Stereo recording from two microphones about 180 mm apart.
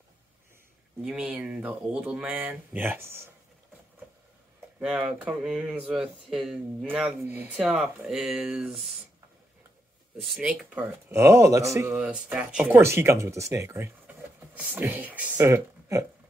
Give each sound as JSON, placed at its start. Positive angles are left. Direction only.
{"t": 1.0, "sound": "speech", "side_deg": -5}
{"t": 4.7, "sound": "speech", "side_deg": -5}
{"t": 10.2, "sound": "speech", "side_deg": 0}
{"t": 11.9, "sound": "speech", "side_deg": -5}